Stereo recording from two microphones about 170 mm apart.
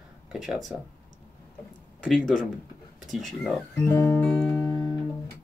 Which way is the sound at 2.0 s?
Centre (ahead or behind).